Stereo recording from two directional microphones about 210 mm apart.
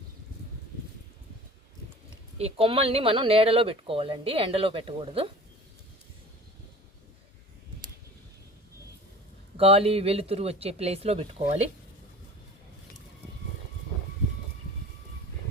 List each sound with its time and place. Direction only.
2.4 s speech: 25° right (ahead or behind)
9.6 s speech: 30° right (ahead or behind)